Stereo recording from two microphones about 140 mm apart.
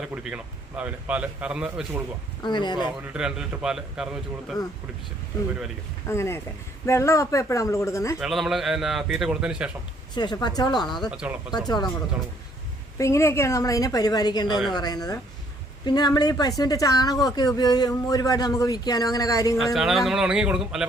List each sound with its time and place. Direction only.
0.0 s a man's voice: 5° right (ahead or behind)
2.4 s speech: 35° left (ahead or behind)
3.0 s a man's voice: 5° right (ahead or behind)
6.1 s speech: 20° left (ahead or behind)
8.2 s a man's voice: centre (ahead or behind)
10.2 s speech: 30° left (ahead or behind)
11.1 s speech: 5° right (ahead or behind)
13.0 s speech: 20° left (ahead or behind)
19.5 s a man's voice: centre (ahead or behind)